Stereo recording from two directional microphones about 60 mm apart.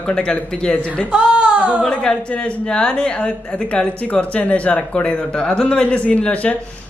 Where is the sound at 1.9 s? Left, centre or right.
Centre.